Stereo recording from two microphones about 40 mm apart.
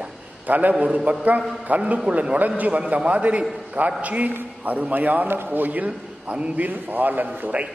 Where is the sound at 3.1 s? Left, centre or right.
Right.